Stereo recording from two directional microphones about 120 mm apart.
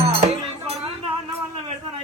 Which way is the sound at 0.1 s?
60° right (ahead or behind).